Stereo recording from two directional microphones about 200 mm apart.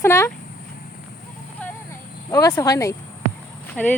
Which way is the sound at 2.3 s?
15° left (ahead or behind).